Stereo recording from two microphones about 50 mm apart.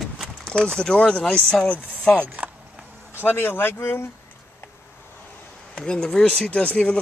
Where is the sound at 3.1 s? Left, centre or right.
Left.